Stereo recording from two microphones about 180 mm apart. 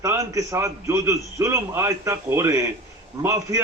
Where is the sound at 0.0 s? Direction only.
15° right (ahead or behind).